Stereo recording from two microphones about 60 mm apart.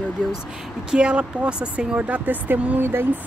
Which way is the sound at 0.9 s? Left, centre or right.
Centre.